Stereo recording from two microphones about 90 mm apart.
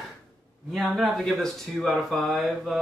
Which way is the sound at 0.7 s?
Centre (ahead or behind).